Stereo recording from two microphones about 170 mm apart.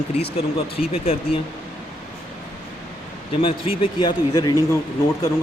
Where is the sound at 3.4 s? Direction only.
30° left (ahead or behind).